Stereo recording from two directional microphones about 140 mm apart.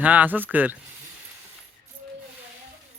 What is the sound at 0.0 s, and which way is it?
Speech, 10° right (ahead or behind).